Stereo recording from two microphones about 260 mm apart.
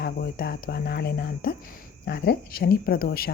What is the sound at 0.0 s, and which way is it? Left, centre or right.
Speech, left.